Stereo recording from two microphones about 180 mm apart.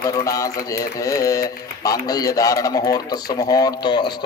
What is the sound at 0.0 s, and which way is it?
Speech, 20° left (ahead or behind).